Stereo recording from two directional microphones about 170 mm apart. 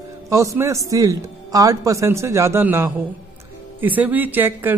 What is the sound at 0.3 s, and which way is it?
Speech, 20° right (ahead or behind).